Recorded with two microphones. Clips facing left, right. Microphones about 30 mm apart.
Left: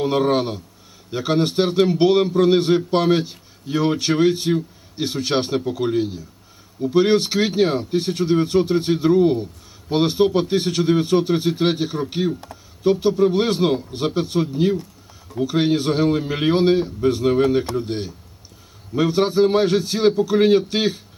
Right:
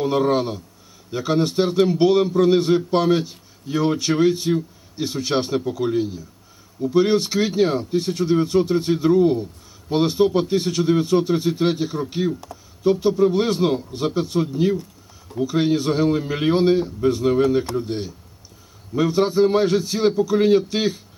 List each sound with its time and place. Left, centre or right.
0.0 s a man's voice: left
13.9 s a man's voice: left